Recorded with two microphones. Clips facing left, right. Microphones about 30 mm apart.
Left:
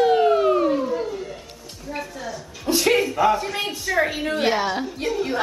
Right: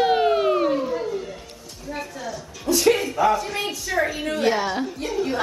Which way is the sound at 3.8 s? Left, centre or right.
Centre.